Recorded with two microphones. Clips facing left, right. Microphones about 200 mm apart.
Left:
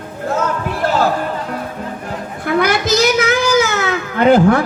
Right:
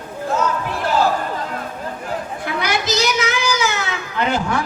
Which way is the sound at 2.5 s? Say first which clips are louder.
Left 8 dB; 55° left (ahead or behind).